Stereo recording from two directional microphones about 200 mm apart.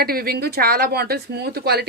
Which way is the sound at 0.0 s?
50° right (ahead or behind).